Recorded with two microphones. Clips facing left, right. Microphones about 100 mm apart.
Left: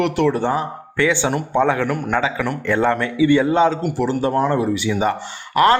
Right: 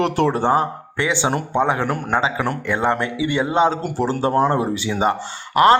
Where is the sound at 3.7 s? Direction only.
35° right (ahead or behind).